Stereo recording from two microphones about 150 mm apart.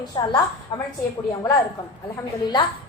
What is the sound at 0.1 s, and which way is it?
Speech, 30° left (ahead or behind).